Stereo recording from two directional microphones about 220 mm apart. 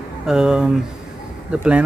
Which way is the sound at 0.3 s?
5° right (ahead or behind).